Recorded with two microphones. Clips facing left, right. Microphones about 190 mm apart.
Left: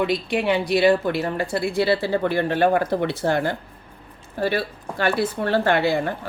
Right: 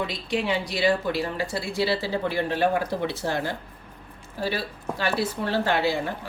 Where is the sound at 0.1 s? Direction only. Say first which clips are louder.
Left 5 dB; 60° left (ahead or behind).